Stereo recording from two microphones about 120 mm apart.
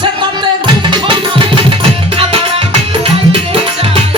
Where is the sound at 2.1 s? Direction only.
50° right (ahead or behind).